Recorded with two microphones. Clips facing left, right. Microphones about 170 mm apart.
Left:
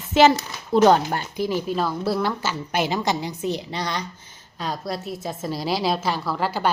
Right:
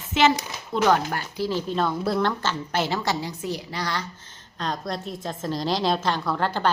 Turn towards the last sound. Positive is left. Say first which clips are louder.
# even
turn(degrees=5)  # may be behind; listen again after turning